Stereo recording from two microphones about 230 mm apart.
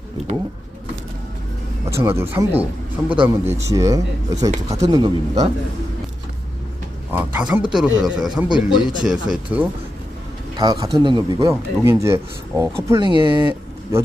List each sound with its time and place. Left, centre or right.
2.0 s speech: centre
7.1 s speech: centre
10.6 s speech: centre